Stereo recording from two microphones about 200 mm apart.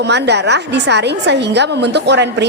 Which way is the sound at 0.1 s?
60° right (ahead or behind).